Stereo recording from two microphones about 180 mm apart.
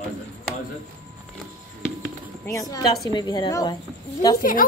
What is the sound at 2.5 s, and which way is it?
A woman's voice, 20° left (ahead or behind).